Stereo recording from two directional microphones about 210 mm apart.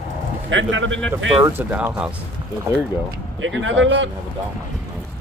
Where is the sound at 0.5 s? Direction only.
65° right (ahead or behind).